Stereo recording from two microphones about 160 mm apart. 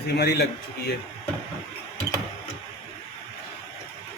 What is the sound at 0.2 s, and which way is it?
Speech, 90° left.